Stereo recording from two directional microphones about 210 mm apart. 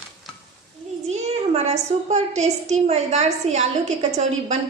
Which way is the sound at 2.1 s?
30° right (ahead or behind).